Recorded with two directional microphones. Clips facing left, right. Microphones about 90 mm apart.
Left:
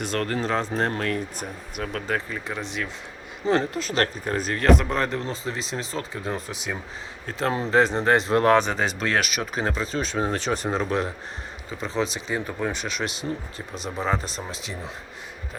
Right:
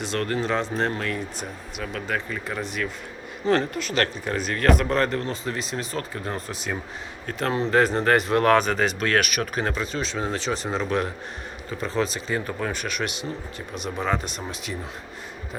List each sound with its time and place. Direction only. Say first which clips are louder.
0.0 s speech: even; 45° left (ahead or behind)
3.4 s speech: even; 15° left (ahead or behind)
3.8 s speech: even; 35° left (ahead or behind)
4.6 s speech: even; 20° left (ahead or behind); by 10.9 s 40° left (ahead or behind)
11.8 s speech: right 1 dB; 20° left (ahead or behind)